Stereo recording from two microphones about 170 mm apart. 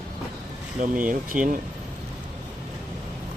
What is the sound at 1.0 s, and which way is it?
Speech, 50° right (ahead or behind).